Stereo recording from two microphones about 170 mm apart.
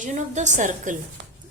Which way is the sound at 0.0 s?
45° right (ahead or behind).